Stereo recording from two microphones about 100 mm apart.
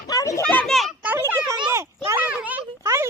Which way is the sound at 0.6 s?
Centre (ahead or behind).